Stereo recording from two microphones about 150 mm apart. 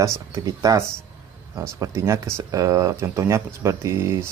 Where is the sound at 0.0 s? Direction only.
20° right (ahead or behind).